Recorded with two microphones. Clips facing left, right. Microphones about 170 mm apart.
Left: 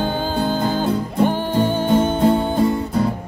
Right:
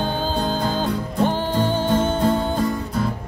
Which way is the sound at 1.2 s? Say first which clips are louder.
Left 2 dB; 15° left (ahead or behind).